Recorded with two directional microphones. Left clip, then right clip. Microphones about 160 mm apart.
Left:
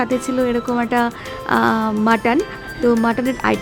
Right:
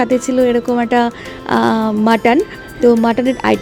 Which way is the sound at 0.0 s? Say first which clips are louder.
Right 6 dB; 15° right (ahead or behind).